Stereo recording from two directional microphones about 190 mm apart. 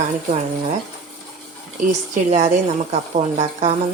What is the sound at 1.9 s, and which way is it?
A woman's voice, 40° right (ahead or behind).